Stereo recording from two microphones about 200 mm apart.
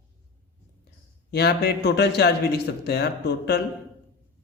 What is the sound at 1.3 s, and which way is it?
A man's voice, 55° left (ahead or behind).